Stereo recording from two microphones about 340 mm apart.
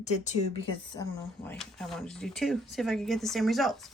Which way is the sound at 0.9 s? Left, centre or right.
Centre.